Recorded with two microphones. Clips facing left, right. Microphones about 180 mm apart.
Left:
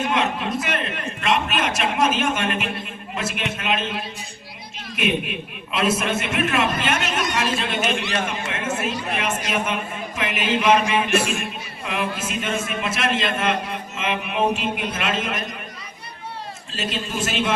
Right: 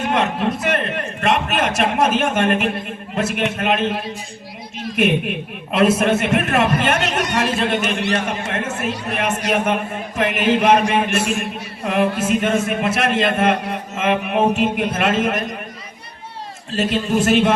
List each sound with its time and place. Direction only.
0.1 s a sound: 55° right (ahead or behind)
4.9 s a man's voice: 55° right (ahead or behind)
16.7 s a man's voice: 60° right (ahead or behind)